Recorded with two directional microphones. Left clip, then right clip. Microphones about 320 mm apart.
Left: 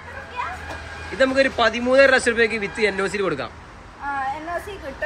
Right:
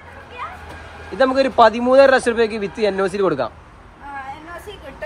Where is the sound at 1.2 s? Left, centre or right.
Centre.